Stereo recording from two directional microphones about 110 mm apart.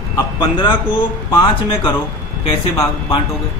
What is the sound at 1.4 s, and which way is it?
Speech, 50° left (ahead or behind).